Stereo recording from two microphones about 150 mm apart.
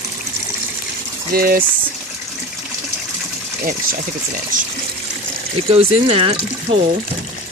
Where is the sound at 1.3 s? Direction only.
75° right (ahead or behind).